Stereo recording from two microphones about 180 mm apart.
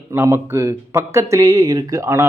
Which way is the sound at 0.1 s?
15° right (ahead or behind).